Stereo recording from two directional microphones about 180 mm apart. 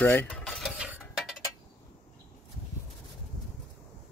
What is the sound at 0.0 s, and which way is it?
Stir, 10° left (ahead or behind).